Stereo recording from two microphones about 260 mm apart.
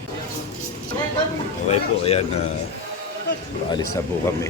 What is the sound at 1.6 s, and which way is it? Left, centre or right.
Speech, left.